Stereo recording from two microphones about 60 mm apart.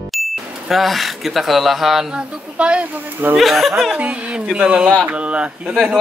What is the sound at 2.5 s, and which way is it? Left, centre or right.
Speech, right.